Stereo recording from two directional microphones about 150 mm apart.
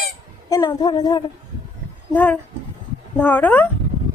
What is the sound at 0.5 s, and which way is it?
Speech, 30° left (ahead or behind).